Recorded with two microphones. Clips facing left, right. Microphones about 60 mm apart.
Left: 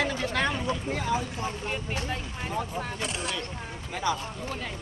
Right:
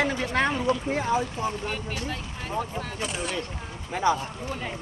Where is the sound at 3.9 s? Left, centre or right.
Right.